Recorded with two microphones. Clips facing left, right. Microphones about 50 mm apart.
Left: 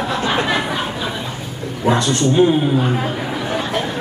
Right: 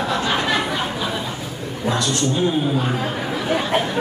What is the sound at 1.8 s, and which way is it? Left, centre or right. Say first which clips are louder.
Speech: left 5 dB; left.